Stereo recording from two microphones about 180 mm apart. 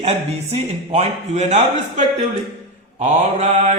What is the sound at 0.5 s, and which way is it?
A man's voice, 40° right (ahead or behind).